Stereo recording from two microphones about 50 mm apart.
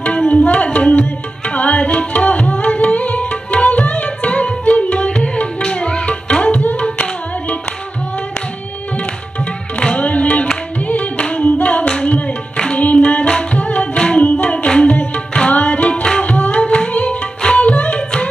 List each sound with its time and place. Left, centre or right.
0.3 s tabla: left
9.8 s music: left